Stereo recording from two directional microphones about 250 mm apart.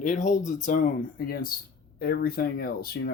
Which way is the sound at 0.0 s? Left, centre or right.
Left.